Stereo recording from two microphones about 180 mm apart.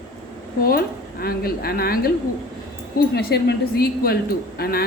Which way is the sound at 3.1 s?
65° left (ahead or behind).